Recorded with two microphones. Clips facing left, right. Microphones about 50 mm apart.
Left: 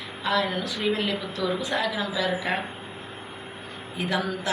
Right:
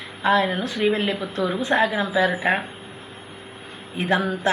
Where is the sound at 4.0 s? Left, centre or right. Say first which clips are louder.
Right 6 dB; right.